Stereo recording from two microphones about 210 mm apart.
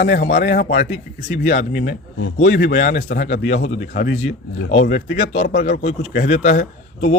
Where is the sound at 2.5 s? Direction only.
40° left (ahead or behind).